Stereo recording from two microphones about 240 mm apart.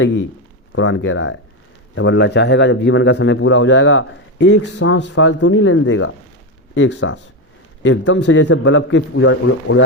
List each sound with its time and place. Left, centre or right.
0.0 s a man's voice: left